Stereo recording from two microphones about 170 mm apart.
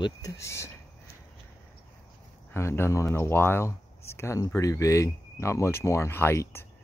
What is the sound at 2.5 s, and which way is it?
Speech, 15° left (ahead or behind).